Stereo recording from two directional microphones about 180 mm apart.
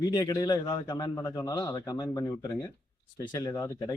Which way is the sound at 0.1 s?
20° left (ahead or behind).